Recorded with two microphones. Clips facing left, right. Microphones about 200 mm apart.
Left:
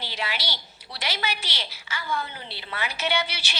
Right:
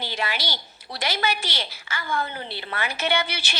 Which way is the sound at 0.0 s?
50° right (ahead or behind).